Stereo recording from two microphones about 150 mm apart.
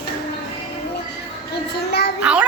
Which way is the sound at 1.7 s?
90° left.